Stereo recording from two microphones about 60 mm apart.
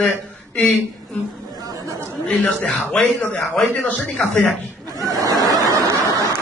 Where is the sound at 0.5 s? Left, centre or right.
Left.